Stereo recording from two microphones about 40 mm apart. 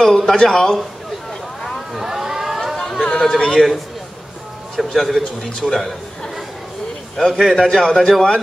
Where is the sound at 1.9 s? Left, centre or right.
Centre.